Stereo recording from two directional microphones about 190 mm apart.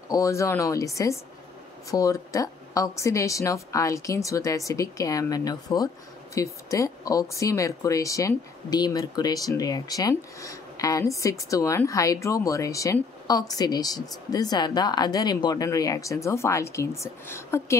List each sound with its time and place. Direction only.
0.1 s speech: 15° left (ahead or behind)